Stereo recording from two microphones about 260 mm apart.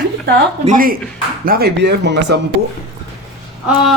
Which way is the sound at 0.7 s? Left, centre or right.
Right.